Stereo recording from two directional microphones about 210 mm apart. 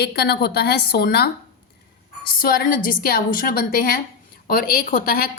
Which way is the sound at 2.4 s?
45° left (ahead or behind).